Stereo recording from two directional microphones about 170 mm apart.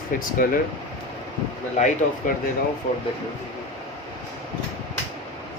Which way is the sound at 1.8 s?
45° left (ahead or behind).